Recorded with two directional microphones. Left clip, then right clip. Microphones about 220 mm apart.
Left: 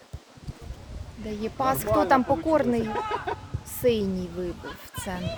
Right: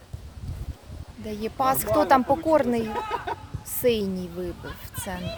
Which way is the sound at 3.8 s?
20° right (ahead or behind).